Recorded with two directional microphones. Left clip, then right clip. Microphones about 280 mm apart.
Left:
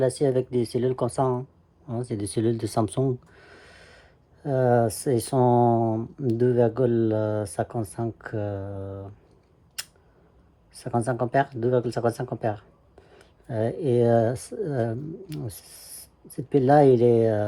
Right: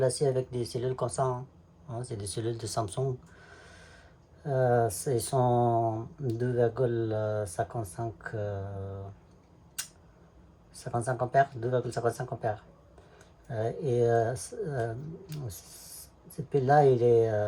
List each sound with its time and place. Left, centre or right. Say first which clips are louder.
0.0 s speech: left 5 dB; left
10.8 s speech: left 5 dB; left
16.5 s speech: left 5 dB; left